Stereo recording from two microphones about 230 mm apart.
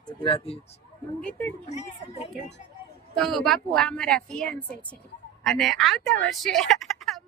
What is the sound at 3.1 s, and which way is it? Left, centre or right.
A woman's voice, centre.